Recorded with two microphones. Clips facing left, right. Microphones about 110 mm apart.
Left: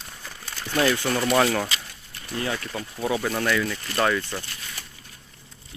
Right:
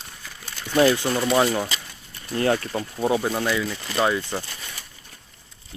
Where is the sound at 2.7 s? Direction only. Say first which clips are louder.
Right 4 dB; 30° right (ahead or behind).